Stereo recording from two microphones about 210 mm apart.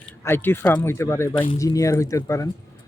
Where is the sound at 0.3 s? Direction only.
10° left (ahead or behind).